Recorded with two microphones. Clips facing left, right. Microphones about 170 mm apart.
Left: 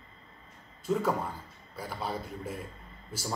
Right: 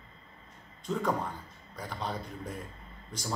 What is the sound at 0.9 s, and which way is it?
A man's voice, 5° left (ahead or behind).